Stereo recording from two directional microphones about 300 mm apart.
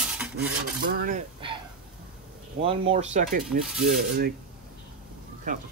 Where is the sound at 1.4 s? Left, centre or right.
Centre.